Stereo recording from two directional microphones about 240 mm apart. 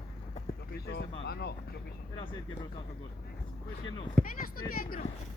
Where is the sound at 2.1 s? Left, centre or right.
Centre.